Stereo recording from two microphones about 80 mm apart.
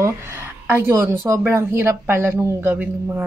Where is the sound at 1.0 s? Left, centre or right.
Right.